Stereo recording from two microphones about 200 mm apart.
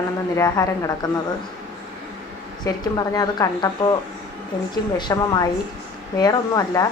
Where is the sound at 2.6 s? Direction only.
20° left (ahead or behind).